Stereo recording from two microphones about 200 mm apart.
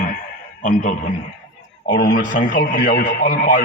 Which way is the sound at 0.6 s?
40° left (ahead or behind).